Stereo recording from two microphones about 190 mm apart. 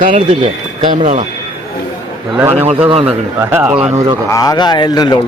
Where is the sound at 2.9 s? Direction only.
30° right (ahead or behind).